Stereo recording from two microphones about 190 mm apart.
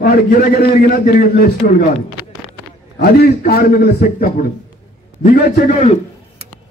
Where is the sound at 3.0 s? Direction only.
55° left (ahead or behind).